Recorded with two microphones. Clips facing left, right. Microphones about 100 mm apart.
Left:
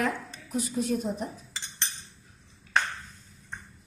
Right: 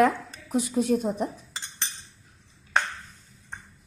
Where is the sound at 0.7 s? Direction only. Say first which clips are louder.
Right 5 dB; 45° right (ahead or behind).